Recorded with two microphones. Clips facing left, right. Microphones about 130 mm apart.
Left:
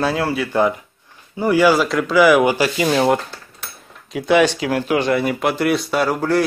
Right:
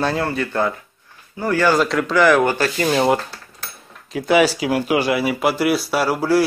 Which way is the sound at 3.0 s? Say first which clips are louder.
Left 1 dB; centre (ahead or behind).